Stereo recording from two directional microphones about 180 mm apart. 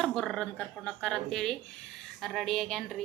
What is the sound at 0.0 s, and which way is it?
A woman's voice, centre (ahead or behind).